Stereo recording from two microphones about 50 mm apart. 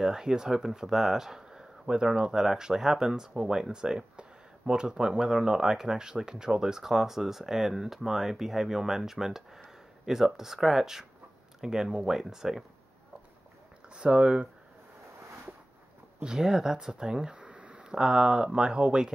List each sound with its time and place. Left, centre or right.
0.0 s speech: centre
13.8 s speech: right
16.2 s speech: centre